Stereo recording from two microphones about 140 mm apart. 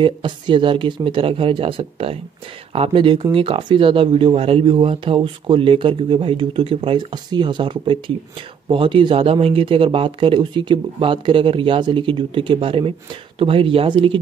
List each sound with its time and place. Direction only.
0.0 s speech: 35° right (ahead or behind)